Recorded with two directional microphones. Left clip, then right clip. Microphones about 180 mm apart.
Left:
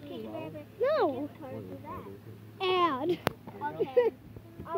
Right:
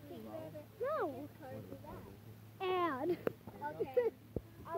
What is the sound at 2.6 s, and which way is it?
Speech, 20° right (ahead or behind).